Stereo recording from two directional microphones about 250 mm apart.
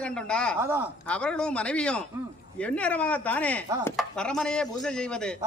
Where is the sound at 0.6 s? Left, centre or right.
Centre.